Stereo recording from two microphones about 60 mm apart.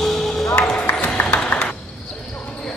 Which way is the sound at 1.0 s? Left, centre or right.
Left.